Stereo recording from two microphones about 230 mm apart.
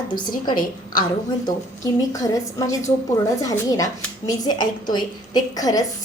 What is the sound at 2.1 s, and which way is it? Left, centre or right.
A woman's voice, centre.